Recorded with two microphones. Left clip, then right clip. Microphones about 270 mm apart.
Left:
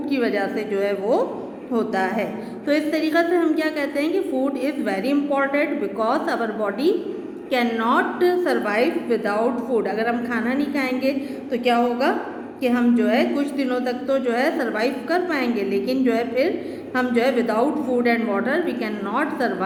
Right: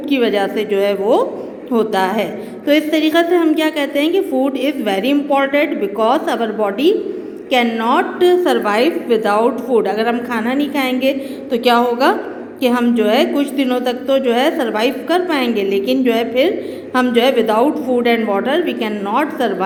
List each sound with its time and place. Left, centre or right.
0.1 s a woman's voice: right
1.7 s a woman's voice: centre